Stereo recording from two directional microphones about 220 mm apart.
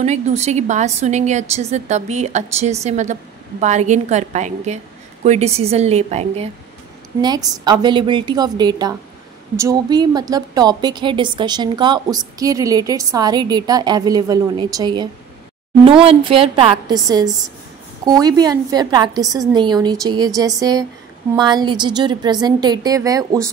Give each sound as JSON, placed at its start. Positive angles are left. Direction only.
{"t": 0.0, "sound": "a woman's voice", "side_deg": -30}
{"t": 7.2, "sound": "a woman's voice", "side_deg": -20}